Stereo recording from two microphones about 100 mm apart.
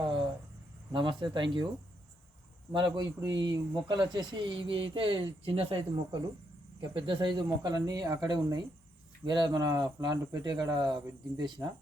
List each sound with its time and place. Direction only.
0.0 s a sound: 50° right (ahead or behind)
0.9 s speech: 50° right (ahead or behind)
2.7 s speech: 50° right (ahead or behind)
9.2 s speech: 50° right (ahead or behind)